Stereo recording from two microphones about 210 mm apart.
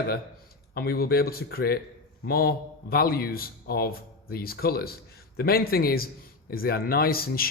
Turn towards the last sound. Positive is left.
turn(degrees=45)  # may be behind; listen again after turning